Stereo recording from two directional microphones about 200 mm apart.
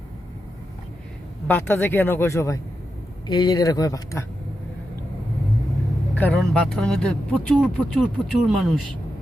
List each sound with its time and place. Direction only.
1.5 s speech: 10° left (ahead or behind)
6.1 s speech: 5° left (ahead or behind)